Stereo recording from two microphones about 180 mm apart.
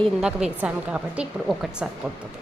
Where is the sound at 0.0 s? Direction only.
5° right (ahead or behind).